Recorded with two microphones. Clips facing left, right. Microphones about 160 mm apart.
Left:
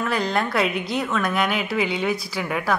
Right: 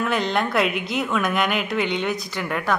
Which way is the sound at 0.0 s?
Centre (ahead or behind).